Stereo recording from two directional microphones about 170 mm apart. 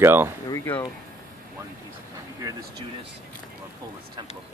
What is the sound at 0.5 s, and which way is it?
Speech, 15° left (ahead or behind).